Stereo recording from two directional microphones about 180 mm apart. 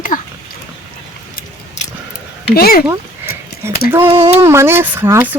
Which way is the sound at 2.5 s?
55° left (ahead or behind).